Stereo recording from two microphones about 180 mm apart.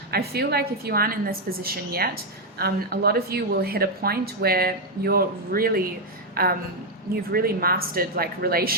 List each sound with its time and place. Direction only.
0.1 s a woman's voice: 60° right (ahead or behind)